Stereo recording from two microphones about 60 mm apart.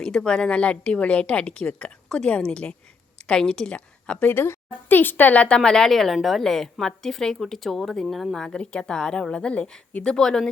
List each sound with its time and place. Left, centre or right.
0.0 s a woman's voice: centre
4.3 s speech: left
5.5 s a woman's voice: centre